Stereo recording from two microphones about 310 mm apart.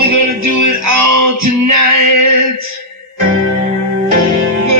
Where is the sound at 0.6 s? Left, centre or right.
Right.